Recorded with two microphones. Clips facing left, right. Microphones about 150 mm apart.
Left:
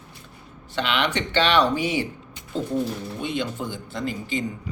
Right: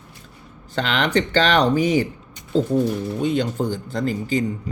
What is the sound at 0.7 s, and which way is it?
A man's voice, 40° right (ahead or behind).